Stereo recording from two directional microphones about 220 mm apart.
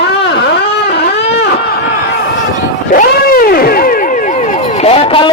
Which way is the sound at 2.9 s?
45° left (ahead or behind).